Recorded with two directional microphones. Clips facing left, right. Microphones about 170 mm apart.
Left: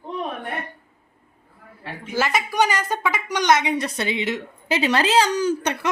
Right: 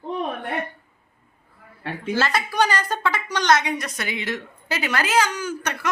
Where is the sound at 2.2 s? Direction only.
15° left (ahead or behind).